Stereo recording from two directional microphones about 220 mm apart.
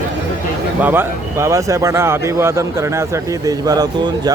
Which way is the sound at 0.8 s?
10° right (ahead or behind).